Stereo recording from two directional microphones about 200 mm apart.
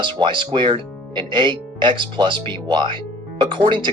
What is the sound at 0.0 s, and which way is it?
Speech, 25° right (ahead or behind).